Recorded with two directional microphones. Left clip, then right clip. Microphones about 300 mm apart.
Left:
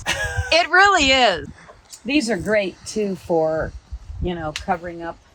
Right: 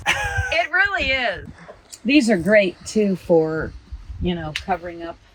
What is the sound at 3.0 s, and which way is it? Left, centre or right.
Speech, right.